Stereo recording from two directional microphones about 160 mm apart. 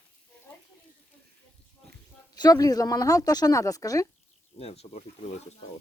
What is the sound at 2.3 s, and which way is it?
Speech, 25° left (ahead or behind).